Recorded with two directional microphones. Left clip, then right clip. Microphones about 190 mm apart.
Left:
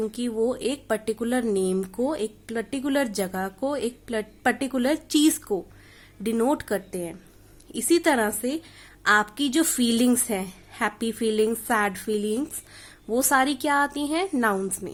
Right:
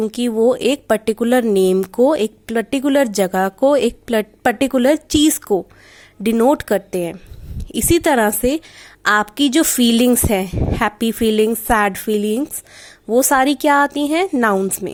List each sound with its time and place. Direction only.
0.0 s a woman's voice: 40° right (ahead or behind)